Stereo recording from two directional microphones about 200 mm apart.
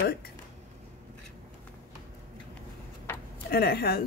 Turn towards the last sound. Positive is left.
turn(degrees=50)  # may be behind; listen again after turning